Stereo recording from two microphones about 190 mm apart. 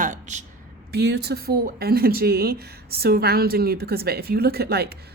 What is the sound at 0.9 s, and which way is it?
Speech, 60° right (ahead or behind).